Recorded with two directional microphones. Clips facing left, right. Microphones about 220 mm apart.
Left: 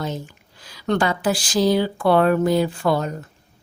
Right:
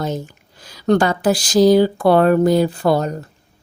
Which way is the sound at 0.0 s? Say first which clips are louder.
Right 4 dB; 45° right (ahead or behind).